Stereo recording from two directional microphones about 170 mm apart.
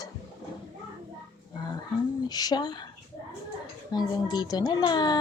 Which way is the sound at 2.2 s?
25° left (ahead or behind).